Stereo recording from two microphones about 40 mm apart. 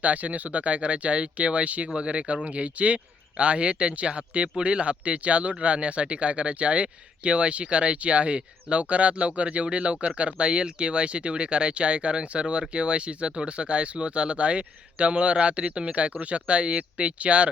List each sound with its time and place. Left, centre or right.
0.0 s speech: right